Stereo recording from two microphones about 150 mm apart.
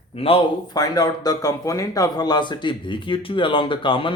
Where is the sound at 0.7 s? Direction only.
25° left (ahead or behind).